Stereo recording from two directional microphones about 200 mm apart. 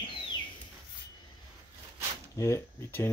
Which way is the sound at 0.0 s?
25° left (ahead or behind).